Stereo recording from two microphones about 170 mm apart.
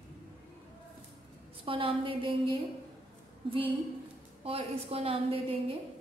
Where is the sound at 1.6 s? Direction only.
30° right (ahead or behind).